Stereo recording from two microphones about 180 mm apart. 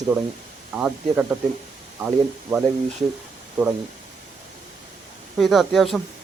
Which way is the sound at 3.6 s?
10° right (ahead or behind).